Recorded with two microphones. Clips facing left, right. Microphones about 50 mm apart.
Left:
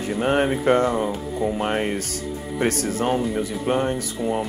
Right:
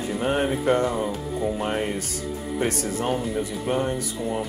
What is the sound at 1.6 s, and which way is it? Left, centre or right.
Speech, left.